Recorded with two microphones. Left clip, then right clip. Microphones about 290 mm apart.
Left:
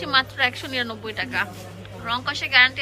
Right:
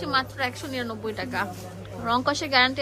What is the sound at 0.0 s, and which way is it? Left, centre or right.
A woman's voice, centre.